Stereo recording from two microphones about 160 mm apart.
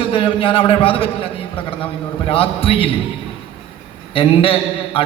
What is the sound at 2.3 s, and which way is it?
Speech, 35° left (ahead or behind).